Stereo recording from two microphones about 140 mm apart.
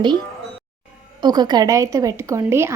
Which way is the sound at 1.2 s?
30° right (ahead or behind).